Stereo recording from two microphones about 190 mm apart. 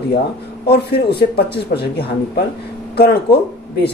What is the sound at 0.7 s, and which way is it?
Speech, 60° left (ahead or behind).